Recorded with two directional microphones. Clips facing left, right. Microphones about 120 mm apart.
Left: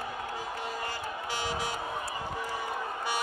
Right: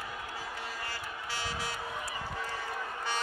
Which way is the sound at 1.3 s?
15° left (ahead or behind).